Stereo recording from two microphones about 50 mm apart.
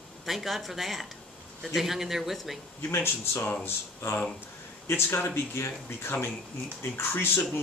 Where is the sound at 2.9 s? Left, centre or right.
Left.